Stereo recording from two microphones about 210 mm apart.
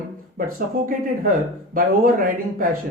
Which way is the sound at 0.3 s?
45° right (ahead or behind).